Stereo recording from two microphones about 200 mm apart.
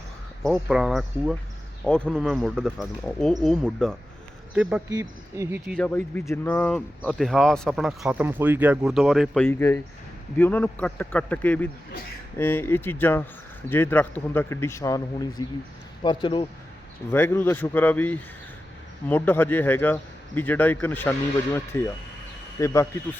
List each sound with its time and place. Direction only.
0.4 s speech: centre (ahead or behind)
4.9 s speech: 15° right (ahead or behind)
5.7 s a man's voice: 5° left (ahead or behind); by 16.5 s 25° left (ahead or behind)
17.1 s a man's voice: 10° left (ahead or behind)